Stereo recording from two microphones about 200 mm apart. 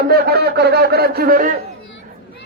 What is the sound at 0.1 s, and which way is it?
A man's voice, 55° right (ahead or behind).